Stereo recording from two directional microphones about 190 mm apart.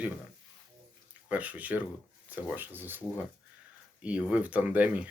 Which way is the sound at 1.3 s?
10° right (ahead or behind).